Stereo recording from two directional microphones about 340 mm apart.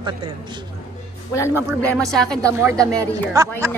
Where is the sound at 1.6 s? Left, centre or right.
Centre.